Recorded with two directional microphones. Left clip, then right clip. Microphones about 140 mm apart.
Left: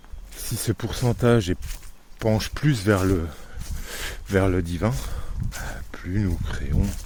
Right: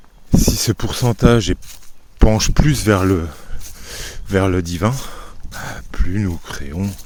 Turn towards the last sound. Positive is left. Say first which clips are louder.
# right 4 dB
turn(degrees=-35)  # may be behind; listen again after turning